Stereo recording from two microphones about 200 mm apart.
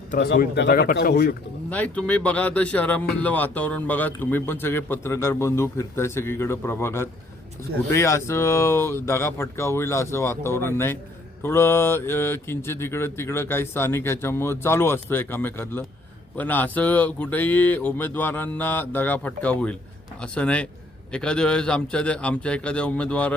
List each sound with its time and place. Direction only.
0.2 s speech: 55° left (ahead or behind)
1.7 s a man's voice: 5° left (ahead or behind)